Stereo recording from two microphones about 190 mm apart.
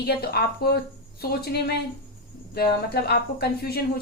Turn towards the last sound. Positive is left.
turn(degrees=55)  # may be behind; listen again after turning